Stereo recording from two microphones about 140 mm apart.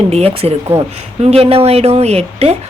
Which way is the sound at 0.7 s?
20° right (ahead or behind).